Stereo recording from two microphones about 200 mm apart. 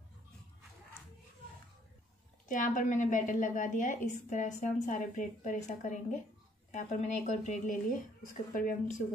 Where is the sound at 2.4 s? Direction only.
40° left (ahead or behind).